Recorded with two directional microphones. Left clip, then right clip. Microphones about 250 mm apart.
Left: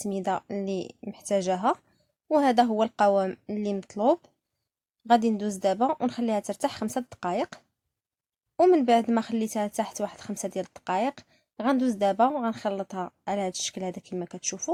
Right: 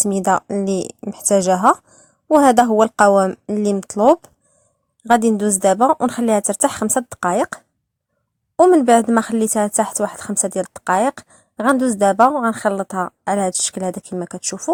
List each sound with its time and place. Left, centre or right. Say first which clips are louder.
0.0 s speech: right 12 dB; right